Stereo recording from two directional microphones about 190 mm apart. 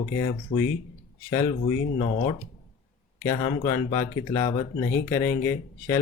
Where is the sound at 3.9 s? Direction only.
15° left (ahead or behind).